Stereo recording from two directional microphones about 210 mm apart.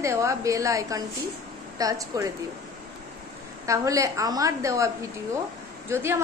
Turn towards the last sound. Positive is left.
turn(degrees=-10)  # may be behind; listen again after turning